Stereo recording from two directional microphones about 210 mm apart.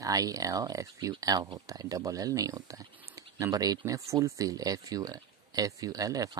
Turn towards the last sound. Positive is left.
turn(degrees=-15)  # may be behind; listen again after turning